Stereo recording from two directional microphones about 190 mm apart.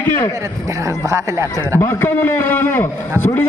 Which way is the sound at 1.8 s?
10° left (ahead or behind).